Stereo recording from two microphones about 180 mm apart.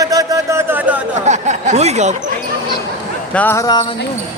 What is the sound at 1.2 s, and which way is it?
Speech, 40° right (ahead or behind).